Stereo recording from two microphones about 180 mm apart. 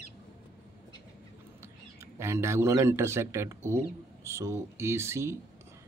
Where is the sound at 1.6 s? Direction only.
15° right (ahead or behind).